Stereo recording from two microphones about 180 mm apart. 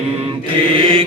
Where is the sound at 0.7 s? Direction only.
30° right (ahead or behind).